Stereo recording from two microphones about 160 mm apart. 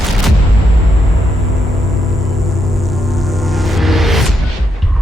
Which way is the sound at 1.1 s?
Centre (ahead or behind).